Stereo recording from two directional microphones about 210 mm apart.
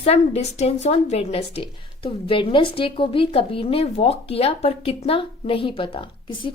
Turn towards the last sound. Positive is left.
turn(degrees=25)  # may be behind; listen again after turning